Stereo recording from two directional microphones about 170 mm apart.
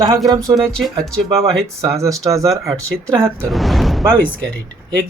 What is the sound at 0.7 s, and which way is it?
Speech, 5° left (ahead or behind).